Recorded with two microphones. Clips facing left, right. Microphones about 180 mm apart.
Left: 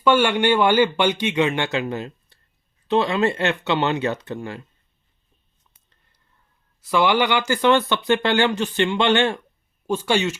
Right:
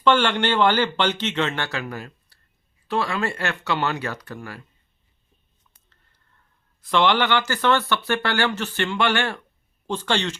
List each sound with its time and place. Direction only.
0.0 s speech: 10° left (ahead or behind)
6.8 s speech: 10° left (ahead or behind)